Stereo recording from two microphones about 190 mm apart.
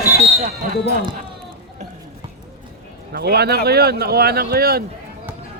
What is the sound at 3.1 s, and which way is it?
Speech, 60° right (ahead or behind).